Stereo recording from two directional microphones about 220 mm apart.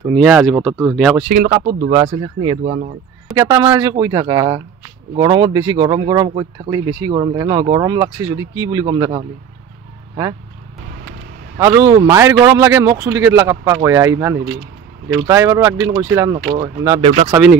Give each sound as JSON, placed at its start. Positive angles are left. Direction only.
{"t": 0.1, "sound": "speech", "side_deg": -5}
{"t": 1.9, "sound": "speech", "side_deg": -20}
{"t": 2.6, "sound": "speech", "side_deg": -35}
{"t": 3.3, "sound": "a man's voice", "side_deg": -15}
{"t": 11.5, "sound": "a man's voice", "side_deg": -15}
{"t": 17.3, "sound": "speech", "side_deg": -5}